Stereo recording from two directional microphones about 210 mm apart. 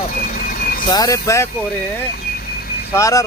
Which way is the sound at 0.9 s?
15° left (ahead or behind).